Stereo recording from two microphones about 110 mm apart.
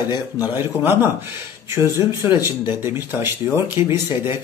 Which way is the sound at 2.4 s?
20° right (ahead or behind).